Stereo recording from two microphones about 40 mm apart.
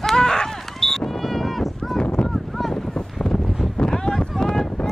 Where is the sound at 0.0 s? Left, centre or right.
Centre.